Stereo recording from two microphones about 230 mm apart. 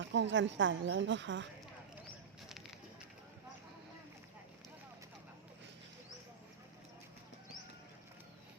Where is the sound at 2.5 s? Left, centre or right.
Centre.